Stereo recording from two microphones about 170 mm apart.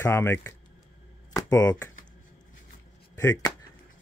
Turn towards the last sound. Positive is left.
turn(degrees=20)  # may be behind; listen again after turning